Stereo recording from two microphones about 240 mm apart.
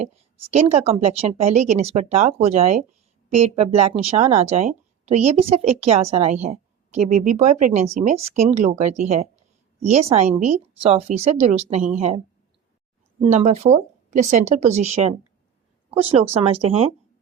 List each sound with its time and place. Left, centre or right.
0.0 s a woman's voice: right
13.2 s a woman's voice: right